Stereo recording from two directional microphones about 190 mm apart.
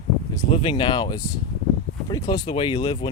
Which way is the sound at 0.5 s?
25° left (ahead or behind).